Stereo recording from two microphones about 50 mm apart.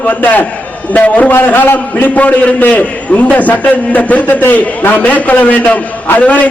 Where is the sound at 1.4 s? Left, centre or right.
Left.